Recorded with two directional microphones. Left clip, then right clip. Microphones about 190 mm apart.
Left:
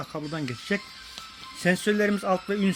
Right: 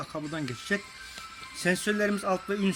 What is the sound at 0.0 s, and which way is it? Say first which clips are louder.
Speech: left 2 dB; 25° left (ahead or behind).